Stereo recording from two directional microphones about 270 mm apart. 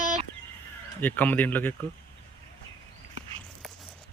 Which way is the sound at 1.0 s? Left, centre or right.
Centre.